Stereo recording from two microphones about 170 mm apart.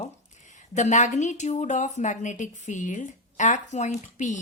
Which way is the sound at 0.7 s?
45° left (ahead or behind).